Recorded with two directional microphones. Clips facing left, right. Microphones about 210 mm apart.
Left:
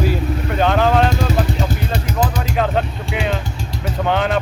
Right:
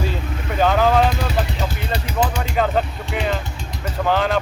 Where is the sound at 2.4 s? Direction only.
Centre (ahead or behind).